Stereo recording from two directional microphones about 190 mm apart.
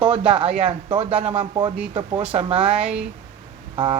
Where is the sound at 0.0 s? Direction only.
25° right (ahead or behind).